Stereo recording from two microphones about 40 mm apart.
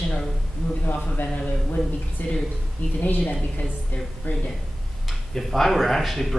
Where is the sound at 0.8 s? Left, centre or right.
Left.